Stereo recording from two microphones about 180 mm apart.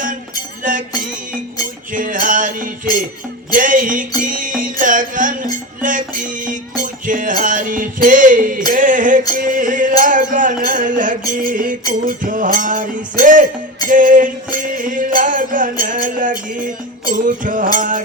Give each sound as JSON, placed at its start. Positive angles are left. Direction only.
{"t": 0.6, "sound": "music", "side_deg": -45}
{"t": 1.9, "sound": "music", "side_deg": -50}